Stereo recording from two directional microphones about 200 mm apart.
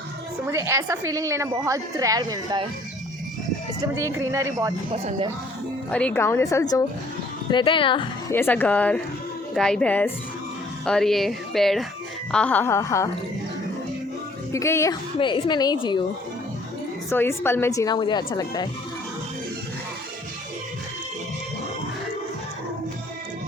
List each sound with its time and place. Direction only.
0.5 s a woman's voice: 15° right (ahead or behind)
3.9 s a woman's voice: 15° right (ahead or behind)
4.9 s speech: 30° right (ahead or behind)
5.9 s a woman's voice: 5° left (ahead or behind); by 8.0 s 25° left (ahead or behind)
8.3 s a woman's voice: 10° left (ahead or behind)
14.5 s a woman's voice: 15° left (ahead or behind)
17.1 s a woman's voice: 10° left (ahead or behind)